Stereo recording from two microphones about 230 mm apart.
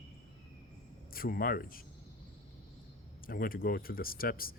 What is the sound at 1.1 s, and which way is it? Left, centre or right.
Speech, left.